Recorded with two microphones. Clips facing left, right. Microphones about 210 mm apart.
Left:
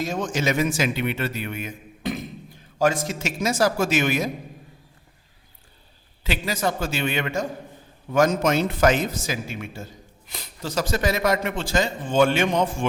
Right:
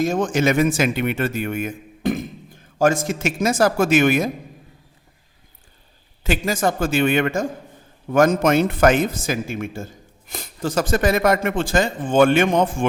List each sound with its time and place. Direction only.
0.0 s a man's voice: 50° right (ahead or behind)
6.2 s a man's voice: 50° right (ahead or behind)